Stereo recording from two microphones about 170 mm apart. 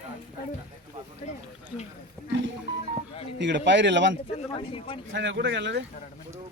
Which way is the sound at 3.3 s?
90° right.